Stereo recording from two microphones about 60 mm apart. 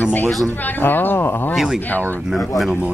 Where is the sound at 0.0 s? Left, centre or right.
Left.